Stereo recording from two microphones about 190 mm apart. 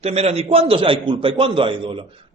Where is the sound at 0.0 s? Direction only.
35° right (ahead or behind).